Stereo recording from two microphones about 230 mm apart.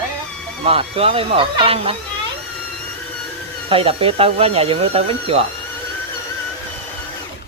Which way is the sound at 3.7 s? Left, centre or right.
Right.